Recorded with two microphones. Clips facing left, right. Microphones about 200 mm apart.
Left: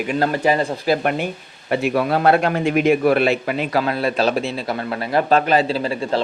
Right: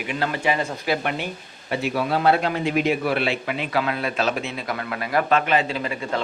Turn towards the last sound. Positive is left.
turn(degrees=30)  # may be behind; listen again after turning